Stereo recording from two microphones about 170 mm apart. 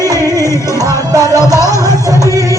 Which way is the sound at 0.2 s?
15° left (ahead or behind).